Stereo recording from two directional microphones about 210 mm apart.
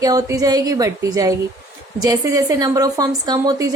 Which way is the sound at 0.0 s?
15° right (ahead or behind).